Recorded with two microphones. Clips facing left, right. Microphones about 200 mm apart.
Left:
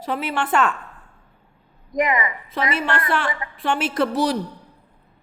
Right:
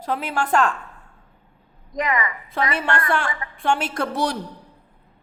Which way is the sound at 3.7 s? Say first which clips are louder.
Left 2 dB; centre (ahead or behind).